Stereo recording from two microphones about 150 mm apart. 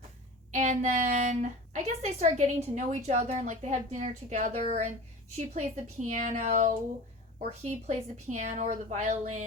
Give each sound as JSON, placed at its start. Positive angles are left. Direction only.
{"t": 0.5, "sound": "a woman's voice", "side_deg": -55}